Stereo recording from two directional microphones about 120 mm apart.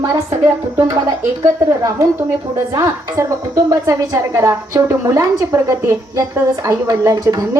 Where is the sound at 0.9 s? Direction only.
30° right (ahead or behind).